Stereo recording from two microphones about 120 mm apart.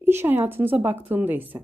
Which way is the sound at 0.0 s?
20° right (ahead or behind).